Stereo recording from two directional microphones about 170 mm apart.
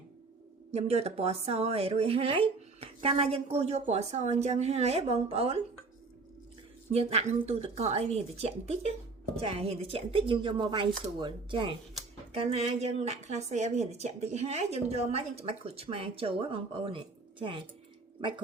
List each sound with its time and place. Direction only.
0.7 s speech: 40° right (ahead or behind)
6.9 s speech: 40° right (ahead or behind)